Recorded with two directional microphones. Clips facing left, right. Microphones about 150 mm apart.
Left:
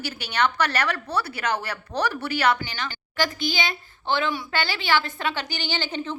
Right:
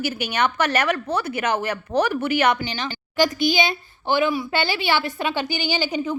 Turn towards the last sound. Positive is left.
turn(degrees=-10)  # may be behind; listen again after turning